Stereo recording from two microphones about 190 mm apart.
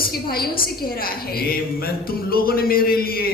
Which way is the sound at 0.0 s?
50° left (ahead or behind).